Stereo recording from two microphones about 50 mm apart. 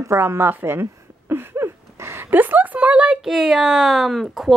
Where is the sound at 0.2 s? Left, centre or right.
Right.